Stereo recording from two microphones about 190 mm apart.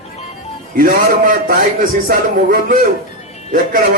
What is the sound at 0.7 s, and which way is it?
A man's voice, 45° right (ahead or behind).